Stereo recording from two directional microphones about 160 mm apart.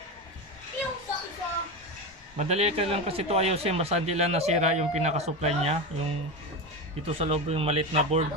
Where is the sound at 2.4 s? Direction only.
40° right (ahead or behind).